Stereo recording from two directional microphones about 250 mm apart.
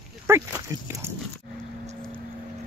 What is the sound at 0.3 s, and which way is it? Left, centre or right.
Speech, centre.